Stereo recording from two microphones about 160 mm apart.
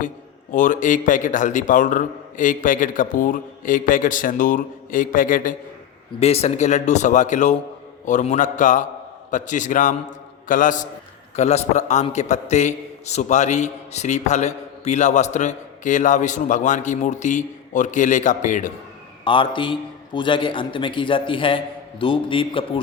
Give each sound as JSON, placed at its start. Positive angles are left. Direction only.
{"t": 0.5, "sound": "a man's voice", "side_deg": 55}
{"t": 6.1, "sound": "a man's voice", "side_deg": 40}
{"t": 19.2, "sound": "a man's voice", "side_deg": 30}